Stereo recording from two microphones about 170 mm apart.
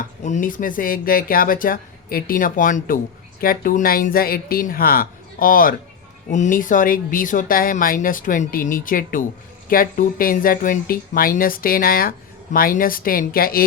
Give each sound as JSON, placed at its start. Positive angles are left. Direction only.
{"t": 0.2, "sound": "speech", "side_deg": 45}